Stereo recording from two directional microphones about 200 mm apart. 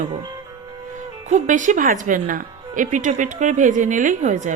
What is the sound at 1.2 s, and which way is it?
Speech, 40° right (ahead or behind).